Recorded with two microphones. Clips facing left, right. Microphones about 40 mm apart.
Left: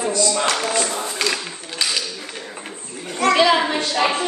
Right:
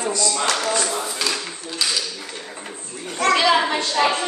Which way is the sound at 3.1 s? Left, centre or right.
Centre.